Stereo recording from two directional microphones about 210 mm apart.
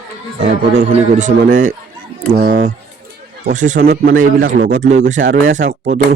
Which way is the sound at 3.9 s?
50° right (ahead or behind).